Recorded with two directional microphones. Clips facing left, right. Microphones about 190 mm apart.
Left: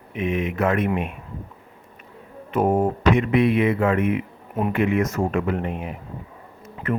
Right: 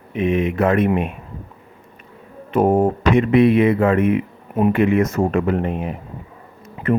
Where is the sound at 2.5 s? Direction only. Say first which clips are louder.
Right 4 dB; 30° right (ahead or behind).